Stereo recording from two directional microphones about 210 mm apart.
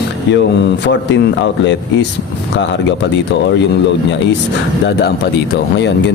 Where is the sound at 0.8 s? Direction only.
55° left (ahead or behind).